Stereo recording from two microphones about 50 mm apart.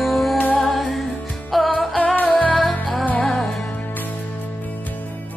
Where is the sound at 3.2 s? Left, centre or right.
Centre.